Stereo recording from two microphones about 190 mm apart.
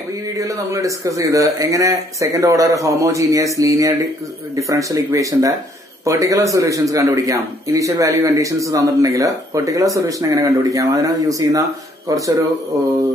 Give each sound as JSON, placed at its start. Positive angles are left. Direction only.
{"t": 0.4, "sound": "a man's voice", "side_deg": -15}